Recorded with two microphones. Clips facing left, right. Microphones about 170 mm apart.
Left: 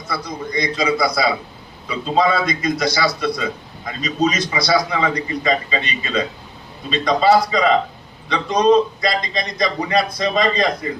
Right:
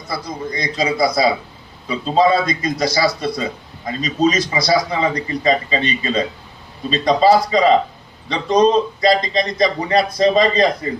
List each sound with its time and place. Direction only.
0.1 s a man's voice: 25° right (ahead or behind)